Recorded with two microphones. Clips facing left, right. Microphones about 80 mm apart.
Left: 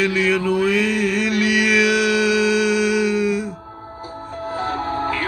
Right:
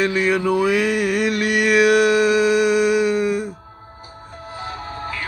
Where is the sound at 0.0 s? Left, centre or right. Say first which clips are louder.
Even; right.